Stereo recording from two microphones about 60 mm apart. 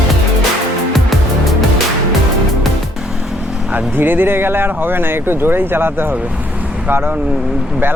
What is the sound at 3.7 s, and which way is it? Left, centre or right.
Speech, right.